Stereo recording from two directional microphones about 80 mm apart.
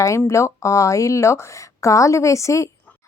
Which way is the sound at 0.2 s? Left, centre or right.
Left.